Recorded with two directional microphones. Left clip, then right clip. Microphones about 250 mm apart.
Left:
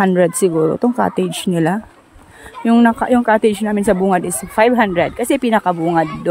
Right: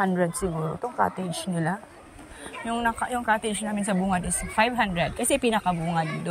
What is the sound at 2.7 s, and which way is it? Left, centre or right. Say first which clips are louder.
Speech: left 12 dB; left.